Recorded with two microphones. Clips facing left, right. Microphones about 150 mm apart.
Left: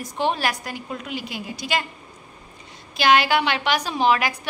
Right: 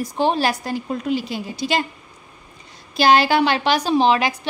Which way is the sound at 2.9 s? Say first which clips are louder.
Right 3 dB; 35° right (ahead or behind).